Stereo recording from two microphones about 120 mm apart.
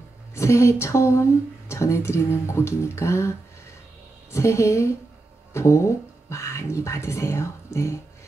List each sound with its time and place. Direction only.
0.3 s speech: 25° left (ahead or behind)